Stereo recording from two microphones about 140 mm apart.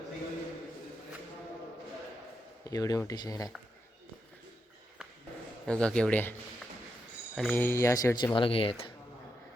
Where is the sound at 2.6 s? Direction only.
25° left (ahead or behind).